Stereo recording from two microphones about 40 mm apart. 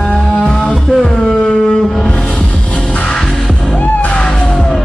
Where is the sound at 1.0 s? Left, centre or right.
Centre.